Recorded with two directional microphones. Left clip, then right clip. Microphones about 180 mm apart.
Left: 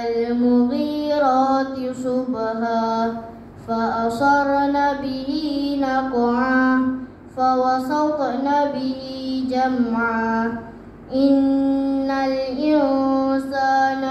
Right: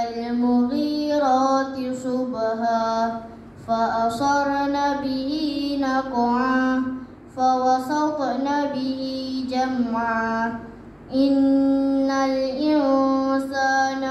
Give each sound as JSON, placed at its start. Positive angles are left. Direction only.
{"t": 0.2, "sound": "music", "side_deg": -15}
{"t": 2.0, "sound": "mantra", "side_deg": -15}
{"t": 3.7, "sound": "music", "side_deg": -15}
{"t": 7.3, "sound": "child singing", "side_deg": -15}